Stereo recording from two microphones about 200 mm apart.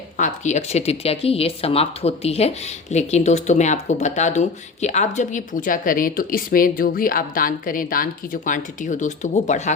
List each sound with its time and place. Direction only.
0.2 s speech: 35° left (ahead or behind)